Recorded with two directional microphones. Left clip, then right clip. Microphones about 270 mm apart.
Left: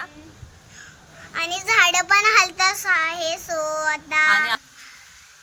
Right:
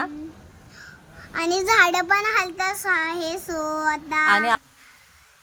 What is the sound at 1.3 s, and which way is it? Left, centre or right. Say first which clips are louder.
A child's voice: right 1 dB; right.